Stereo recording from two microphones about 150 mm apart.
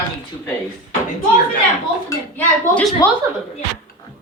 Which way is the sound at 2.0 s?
15° left (ahead or behind).